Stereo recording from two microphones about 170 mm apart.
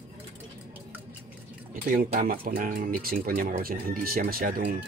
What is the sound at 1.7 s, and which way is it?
Speech, 55° right (ahead or behind).